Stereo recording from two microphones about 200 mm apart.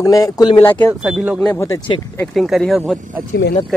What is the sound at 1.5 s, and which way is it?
Speech, 15° left (ahead or behind).